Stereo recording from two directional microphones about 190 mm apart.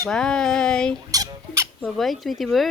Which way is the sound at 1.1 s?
20° right (ahead or behind).